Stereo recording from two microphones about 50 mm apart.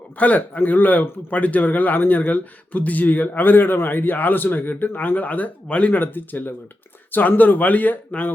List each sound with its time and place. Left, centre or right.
0.2 s speech: left
6.0 s speech: left